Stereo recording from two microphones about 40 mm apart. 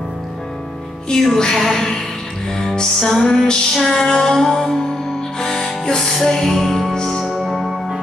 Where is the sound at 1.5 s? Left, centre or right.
Centre.